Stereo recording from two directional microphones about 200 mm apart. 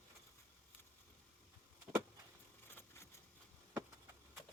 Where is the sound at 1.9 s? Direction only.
10° right (ahead or behind).